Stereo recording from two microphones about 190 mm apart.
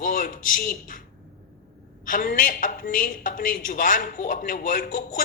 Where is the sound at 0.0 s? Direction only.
45° left (ahead or behind).